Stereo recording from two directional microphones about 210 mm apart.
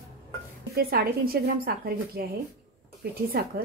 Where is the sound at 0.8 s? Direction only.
45° right (ahead or behind).